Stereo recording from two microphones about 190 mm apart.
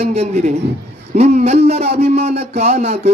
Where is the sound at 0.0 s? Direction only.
35° right (ahead or behind).